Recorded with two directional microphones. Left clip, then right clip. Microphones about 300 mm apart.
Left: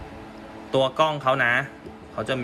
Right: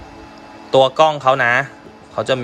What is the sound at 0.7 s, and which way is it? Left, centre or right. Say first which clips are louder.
Speech: right 9 dB; centre.